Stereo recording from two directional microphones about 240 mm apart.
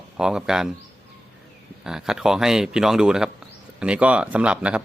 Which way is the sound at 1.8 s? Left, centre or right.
Centre.